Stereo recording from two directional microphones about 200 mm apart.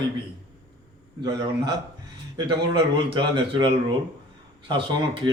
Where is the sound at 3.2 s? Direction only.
25° right (ahead or behind).